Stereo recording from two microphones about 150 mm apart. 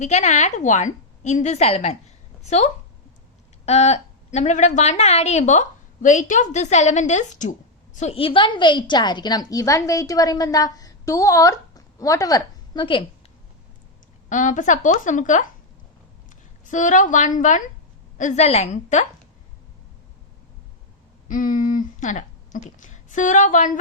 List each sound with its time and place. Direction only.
0.0 s a woman's voice: 50° left (ahead or behind)
3.7 s a woman's voice: 45° left (ahead or behind)
7.9 s a woman's voice: 45° left (ahead or behind)
14.3 s a woman's voice: 55° left (ahead or behind)
21.2 s speech: 60° left (ahead or behind)